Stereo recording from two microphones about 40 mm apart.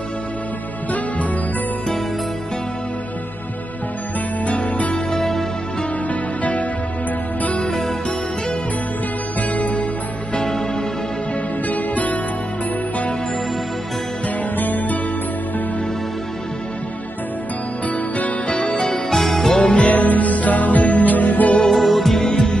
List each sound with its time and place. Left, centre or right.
4.5 s music: left
5.1 s music: centre
6.0 s music: left
9.5 s music: left
11.6 s music: left
14.6 s music: left
17.8 s music: left
19.0 s music: centre
19.6 s music: left
19.9 s music: left
21.7 s music: centre
22.3 s music: centre